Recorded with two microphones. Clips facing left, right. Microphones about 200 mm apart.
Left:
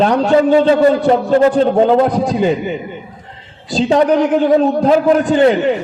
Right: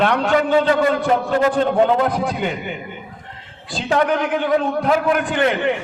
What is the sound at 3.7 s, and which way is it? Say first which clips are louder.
A man's voice: left 7 dB; 35° left (ahead or behind).